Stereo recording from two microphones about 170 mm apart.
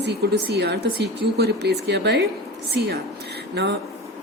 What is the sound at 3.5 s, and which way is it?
Speech, 85° right.